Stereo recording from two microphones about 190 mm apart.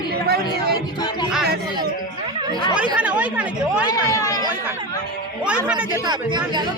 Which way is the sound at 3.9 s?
15° left (ahead or behind).